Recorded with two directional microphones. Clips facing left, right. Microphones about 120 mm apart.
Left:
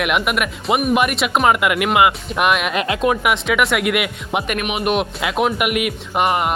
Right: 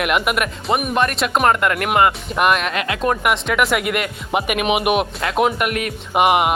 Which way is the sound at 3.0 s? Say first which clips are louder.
Even; centre (ahead or behind).